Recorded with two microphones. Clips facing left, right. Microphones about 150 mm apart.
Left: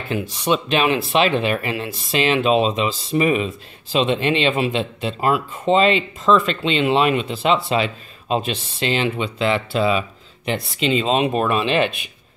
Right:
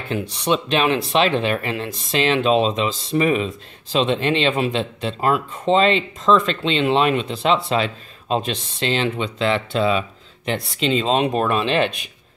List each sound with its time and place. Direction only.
0.1 s speech: 5° left (ahead or behind)